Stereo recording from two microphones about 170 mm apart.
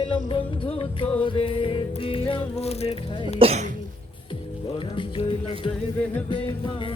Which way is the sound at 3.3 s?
35° right (ahead or behind).